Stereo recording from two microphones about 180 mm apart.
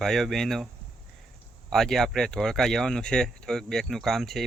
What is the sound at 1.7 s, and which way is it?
Speech, centre (ahead or behind).